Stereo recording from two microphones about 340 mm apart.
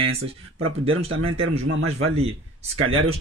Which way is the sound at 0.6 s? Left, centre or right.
Right.